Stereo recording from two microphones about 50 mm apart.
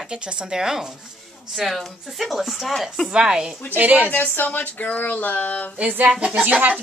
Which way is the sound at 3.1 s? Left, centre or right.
Centre.